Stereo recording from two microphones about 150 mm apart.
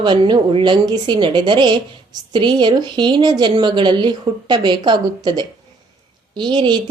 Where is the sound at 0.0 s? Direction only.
30° right (ahead or behind).